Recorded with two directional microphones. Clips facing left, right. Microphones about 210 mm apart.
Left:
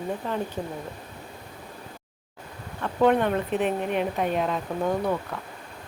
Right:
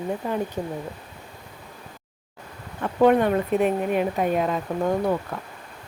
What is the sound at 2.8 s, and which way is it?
Speech, 15° right (ahead or behind).